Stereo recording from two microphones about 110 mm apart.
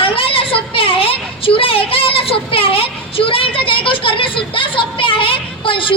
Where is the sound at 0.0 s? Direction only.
55° left (ahead or behind).